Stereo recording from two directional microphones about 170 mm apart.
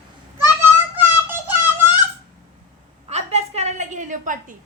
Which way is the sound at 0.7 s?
10° right (ahead or behind).